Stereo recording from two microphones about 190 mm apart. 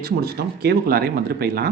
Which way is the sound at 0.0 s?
55° right (ahead or behind).